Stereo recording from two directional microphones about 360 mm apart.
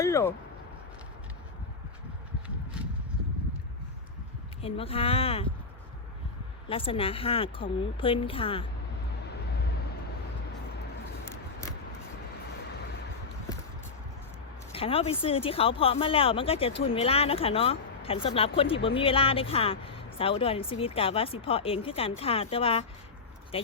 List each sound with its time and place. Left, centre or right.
0.0 s a sound: centre
4.6 s speech: centre
6.7 s speech: centre
14.7 s speech: centre